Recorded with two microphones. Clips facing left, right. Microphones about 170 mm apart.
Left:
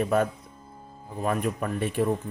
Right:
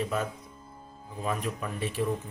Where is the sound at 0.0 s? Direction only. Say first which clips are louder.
Left 7 dB; 55° left (ahead or behind).